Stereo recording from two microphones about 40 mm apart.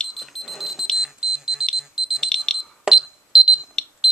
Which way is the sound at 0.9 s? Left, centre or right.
Centre.